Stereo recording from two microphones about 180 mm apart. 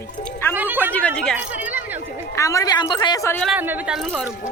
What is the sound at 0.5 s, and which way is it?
Speech, 10° right (ahead or behind).